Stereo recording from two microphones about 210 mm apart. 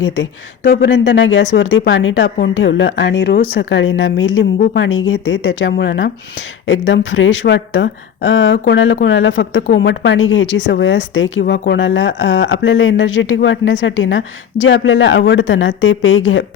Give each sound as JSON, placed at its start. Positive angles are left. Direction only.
{"t": 0.0, "sound": "speech", "side_deg": 60}
{"t": 4.6, "sound": "speech", "side_deg": 55}